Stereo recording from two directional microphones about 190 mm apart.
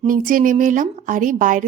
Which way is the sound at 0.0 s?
45° right (ahead or behind).